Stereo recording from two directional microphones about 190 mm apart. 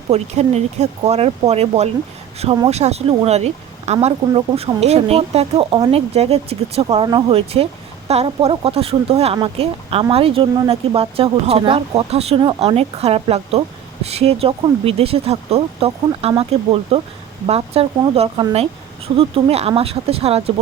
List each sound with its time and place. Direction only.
0.1 s speech: 35° right (ahead or behind)